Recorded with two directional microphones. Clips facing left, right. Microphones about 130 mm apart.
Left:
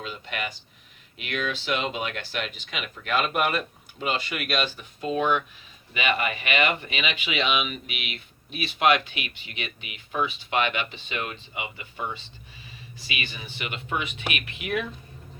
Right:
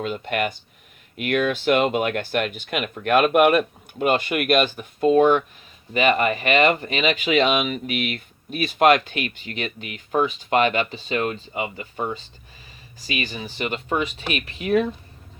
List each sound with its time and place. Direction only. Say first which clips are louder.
0.0 s speech: right 9 dB; 50° right (ahead or behind); by 14.8 s 35° right (ahead or behind)